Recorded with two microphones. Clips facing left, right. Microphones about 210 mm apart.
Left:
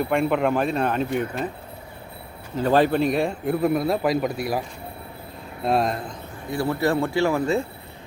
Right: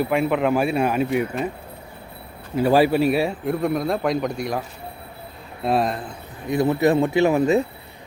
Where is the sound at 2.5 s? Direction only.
10° right (ahead or behind).